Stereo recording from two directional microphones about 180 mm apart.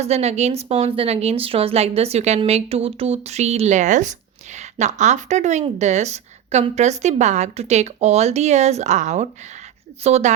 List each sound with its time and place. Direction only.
0.0 s a woman's voice: 35° right (ahead or behind)